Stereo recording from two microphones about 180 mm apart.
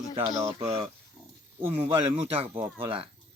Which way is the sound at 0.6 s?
35° right (ahead or behind).